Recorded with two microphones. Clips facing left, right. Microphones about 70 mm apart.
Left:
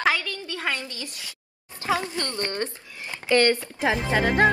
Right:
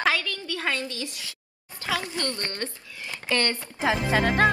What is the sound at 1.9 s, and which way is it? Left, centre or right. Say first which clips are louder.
A woman's voice: left 3 dB; left.